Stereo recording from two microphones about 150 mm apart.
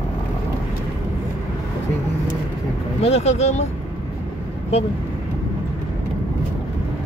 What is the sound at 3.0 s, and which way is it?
Speech, 45° left (ahead or behind).